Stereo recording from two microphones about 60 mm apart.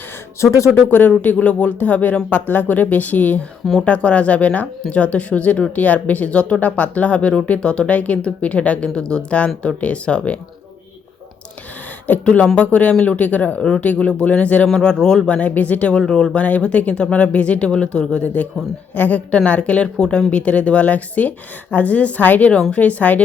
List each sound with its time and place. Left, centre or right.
0.4 s speech: left
0.9 s speech: left
12.2 s speech: centre
13.6 s speech: centre
13.8 s speech: left
14.7 s speech: centre
15.4 s speech: left
16.0 s speech: centre
16.4 s speech: left